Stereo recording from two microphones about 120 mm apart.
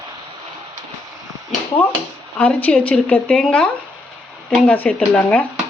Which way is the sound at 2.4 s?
10° left (ahead or behind).